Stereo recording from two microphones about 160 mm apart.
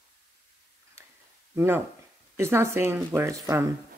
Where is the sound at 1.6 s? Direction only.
15° right (ahead or behind).